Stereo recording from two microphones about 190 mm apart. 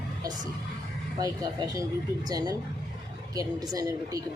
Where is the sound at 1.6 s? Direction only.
15° right (ahead or behind).